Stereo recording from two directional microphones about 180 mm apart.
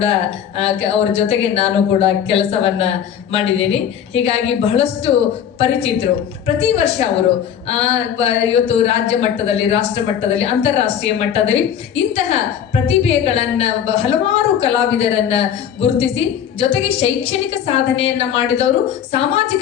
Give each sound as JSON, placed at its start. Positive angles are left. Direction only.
{"t": 0.0, "sound": "a woman's voice", "side_deg": 35}
{"t": 12.8, "sound": "a woman's voice", "side_deg": 35}